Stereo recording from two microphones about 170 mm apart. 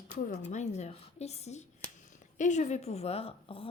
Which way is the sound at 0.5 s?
40° left (ahead or behind).